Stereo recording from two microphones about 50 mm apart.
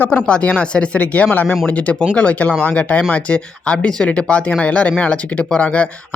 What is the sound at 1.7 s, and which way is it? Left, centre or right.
Speech, left.